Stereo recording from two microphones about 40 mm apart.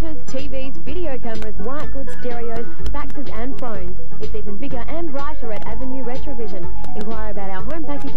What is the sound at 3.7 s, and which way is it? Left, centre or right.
Speech, right.